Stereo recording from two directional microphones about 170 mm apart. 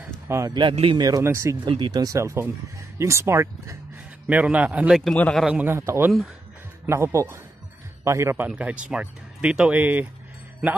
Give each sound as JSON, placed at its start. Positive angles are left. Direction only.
{"t": 0.3, "sound": "speech", "side_deg": -20}
{"t": 1.0, "sound": "a man's voice", "side_deg": -20}
{"t": 5.5, "sound": "speech", "side_deg": -10}